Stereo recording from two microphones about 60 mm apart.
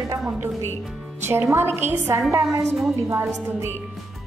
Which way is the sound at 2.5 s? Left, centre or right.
Right.